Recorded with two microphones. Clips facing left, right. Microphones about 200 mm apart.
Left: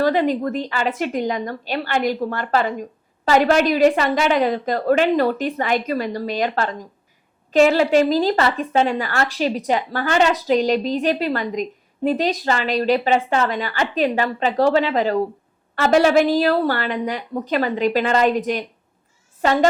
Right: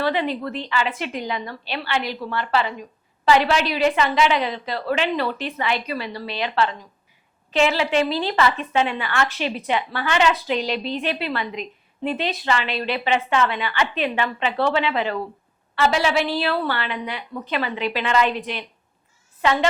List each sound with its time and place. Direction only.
0.0 s a woman's voice: 45° left (ahead or behind)